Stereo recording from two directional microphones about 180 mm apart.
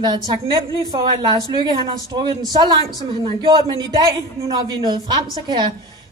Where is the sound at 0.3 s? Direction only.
25° right (ahead or behind).